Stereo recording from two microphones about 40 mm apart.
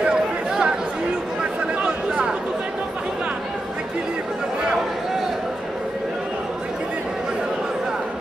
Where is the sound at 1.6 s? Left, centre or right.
Right.